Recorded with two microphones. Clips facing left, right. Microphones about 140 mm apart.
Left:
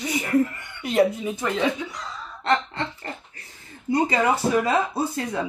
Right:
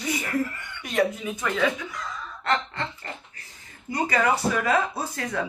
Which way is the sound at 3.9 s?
25° left (ahead or behind).